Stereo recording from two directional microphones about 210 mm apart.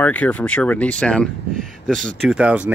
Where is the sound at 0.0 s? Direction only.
5° left (ahead or behind).